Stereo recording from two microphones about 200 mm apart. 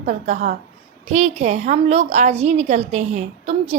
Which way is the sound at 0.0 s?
35° right (ahead or behind).